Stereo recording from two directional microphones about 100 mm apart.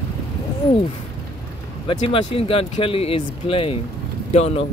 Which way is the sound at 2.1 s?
70° left (ahead or behind).